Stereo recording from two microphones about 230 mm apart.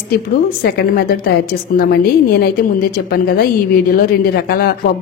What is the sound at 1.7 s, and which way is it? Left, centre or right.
A woman's voice, left.